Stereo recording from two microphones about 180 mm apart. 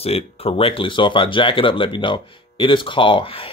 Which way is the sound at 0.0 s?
35° left (ahead or behind).